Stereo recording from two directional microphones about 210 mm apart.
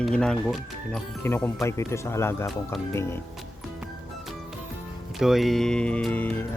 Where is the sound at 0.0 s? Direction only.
5° left (ahead or behind).